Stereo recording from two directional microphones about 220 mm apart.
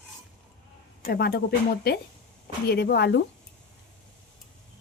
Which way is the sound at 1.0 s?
45° left (ahead or behind).